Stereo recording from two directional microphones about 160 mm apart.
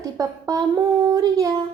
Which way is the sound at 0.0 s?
20° right (ahead or behind).